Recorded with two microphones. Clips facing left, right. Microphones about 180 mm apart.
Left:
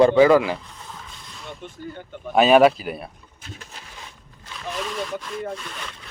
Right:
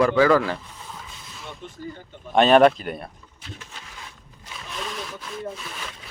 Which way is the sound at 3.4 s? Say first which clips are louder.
Even; 45° left (ahead or behind).